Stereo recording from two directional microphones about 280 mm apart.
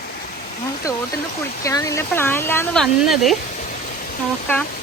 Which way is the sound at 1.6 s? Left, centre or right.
Centre.